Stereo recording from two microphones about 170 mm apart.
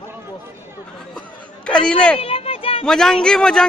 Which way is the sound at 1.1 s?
5° left (ahead or behind).